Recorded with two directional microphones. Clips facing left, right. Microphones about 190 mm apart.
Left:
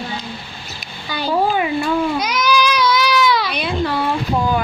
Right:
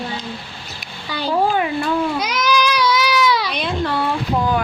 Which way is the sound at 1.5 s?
10° left (ahead or behind).